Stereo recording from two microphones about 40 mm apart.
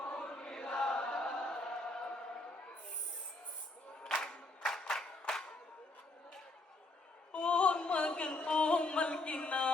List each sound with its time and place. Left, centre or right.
0.0 s chant: left
0.3 s chant: centre
1.0 s choir: centre
4.0 s crowd: centre
7.3 s music: left